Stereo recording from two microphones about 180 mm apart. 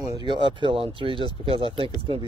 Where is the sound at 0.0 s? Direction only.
25° right (ahead or behind).